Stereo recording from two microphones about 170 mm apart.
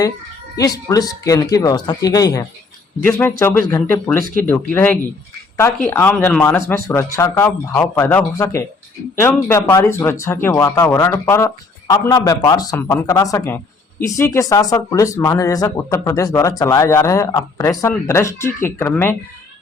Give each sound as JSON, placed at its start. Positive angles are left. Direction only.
{"t": 0.5, "sound": "speech", "side_deg": 20}